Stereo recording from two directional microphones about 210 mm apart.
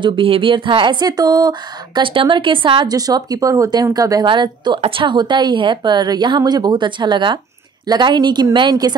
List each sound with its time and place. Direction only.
0.0 s speech: 25° right (ahead or behind)